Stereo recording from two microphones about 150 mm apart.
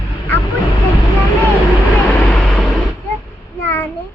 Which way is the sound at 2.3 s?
10° left (ahead or behind).